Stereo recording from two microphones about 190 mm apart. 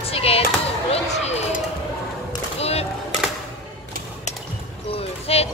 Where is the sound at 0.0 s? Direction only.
30° left (ahead or behind).